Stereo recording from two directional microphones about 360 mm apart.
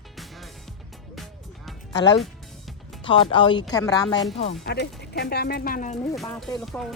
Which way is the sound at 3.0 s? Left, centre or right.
Centre.